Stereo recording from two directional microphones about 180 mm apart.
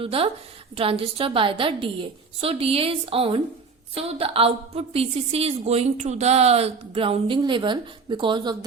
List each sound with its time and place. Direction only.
0.0 s a woman's voice: 30° right (ahead or behind)